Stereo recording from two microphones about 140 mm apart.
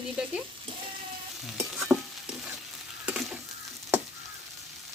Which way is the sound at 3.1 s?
5° right (ahead or behind).